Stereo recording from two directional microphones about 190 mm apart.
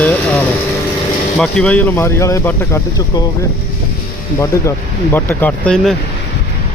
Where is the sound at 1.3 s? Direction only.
5° left (ahead or behind).